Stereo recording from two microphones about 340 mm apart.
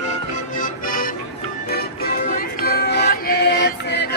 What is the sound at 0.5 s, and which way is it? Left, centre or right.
Music, left.